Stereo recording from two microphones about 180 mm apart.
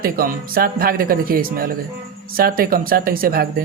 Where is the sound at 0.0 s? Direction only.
55° right (ahead or behind).